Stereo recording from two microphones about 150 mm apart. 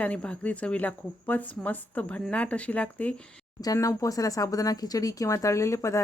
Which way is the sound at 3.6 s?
20° left (ahead or behind).